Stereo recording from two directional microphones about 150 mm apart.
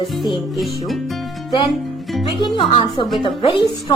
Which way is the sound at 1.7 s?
Centre (ahead or behind).